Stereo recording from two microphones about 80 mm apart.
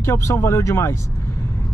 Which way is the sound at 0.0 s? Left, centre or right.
Left.